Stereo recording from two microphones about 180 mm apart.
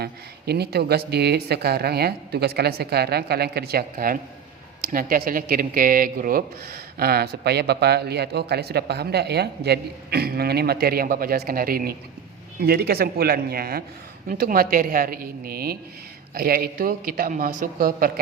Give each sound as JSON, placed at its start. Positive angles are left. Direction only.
{"t": 0.0, "sound": "a woman's voice", "side_deg": -60}